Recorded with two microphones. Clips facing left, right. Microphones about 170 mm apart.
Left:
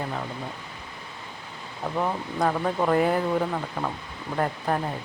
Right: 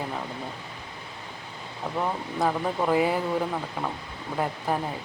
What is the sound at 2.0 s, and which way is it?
Speech, centre (ahead or behind).